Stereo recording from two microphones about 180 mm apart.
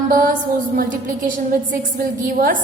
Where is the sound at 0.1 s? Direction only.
50° right (ahead or behind).